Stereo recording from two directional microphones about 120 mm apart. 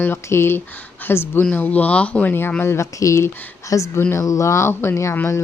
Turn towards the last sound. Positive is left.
turn(degrees=20)  # may be behind; listen again after turning